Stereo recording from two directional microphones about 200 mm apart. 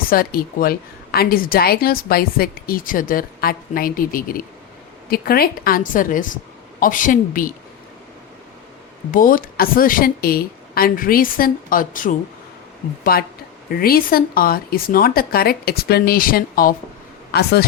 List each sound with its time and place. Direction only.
0.1 s a woman's voice: 45° left (ahead or behind)
9.1 s a woman's voice: 45° left (ahead or behind)